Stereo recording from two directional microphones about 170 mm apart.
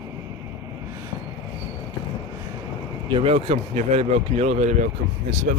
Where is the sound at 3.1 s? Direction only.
35° right (ahead or behind).